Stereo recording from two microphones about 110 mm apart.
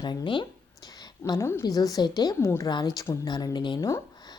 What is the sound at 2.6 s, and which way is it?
Speech, 40° left (ahead or behind).